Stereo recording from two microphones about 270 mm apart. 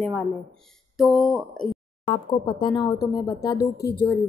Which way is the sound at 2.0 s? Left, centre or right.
Centre.